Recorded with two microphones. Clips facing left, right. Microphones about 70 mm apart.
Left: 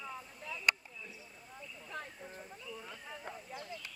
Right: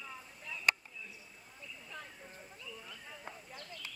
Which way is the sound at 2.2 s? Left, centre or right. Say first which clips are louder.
Left 3 dB; centre.